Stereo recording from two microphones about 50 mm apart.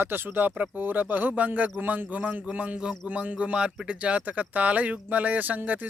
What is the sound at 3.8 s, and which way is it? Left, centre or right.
Speech, right.